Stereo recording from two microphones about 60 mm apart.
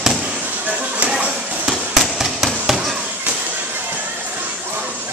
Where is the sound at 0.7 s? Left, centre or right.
Right.